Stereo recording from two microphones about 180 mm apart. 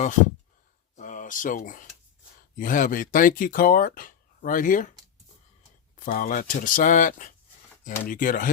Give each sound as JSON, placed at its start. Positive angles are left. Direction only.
{"t": 0.9, "sound": "a sound", "side_deg": 45}
{"t": 2.6, "sound": "speech", "side_deg": 45}
{"t": 6.0, "sound": "speech", "side_deg": 50}